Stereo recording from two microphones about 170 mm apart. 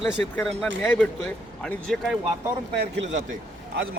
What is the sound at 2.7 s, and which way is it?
Speech, 90° right.